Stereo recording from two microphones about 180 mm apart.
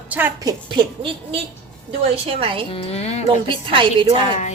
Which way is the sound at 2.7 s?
35° left (ahead or behind).